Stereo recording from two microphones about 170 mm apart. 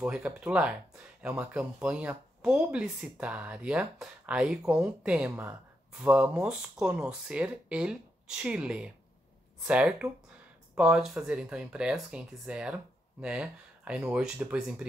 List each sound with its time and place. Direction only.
0.0 s speech: 5° right (ahead or behind)